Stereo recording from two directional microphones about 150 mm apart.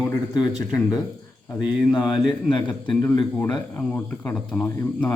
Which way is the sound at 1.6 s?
30° left (ahead or behind).